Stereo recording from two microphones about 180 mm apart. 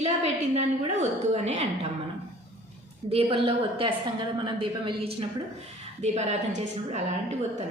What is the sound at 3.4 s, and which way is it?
A woman's voice, 30° right (ahead or behind).